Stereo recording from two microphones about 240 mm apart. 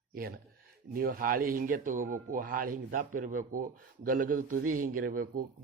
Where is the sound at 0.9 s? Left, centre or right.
Right.